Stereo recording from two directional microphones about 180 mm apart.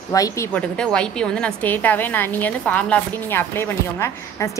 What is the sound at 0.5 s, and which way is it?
A woman's voice, 5° left (ahead or behind).